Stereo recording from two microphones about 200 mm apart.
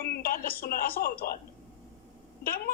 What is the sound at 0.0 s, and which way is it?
A woman's voice, 45° left (ahead or behind).